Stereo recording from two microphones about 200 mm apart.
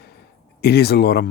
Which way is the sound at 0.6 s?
55° left (ahead or behind).